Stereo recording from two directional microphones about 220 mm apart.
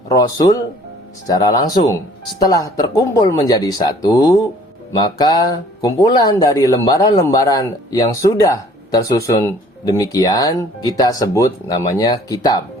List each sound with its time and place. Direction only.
0.1 s speech: 15° left (ahead or behind)